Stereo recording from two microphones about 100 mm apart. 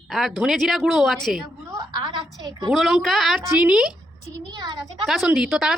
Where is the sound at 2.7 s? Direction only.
5° right (ahead or behind).